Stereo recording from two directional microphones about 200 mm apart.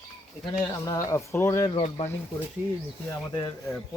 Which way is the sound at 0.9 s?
15° left (ahead or behind).